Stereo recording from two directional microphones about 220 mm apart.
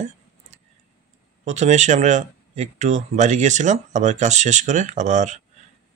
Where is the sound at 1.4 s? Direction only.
30° right (ahead or behind).